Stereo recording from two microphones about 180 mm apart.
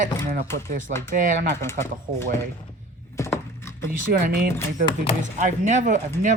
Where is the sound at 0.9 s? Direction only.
60° right (ahead or behind).